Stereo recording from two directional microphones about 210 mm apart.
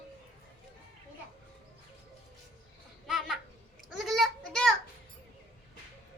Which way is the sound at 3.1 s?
Centre (ahead or behind).